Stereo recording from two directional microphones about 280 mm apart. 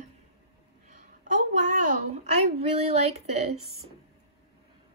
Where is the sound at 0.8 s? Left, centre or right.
Right.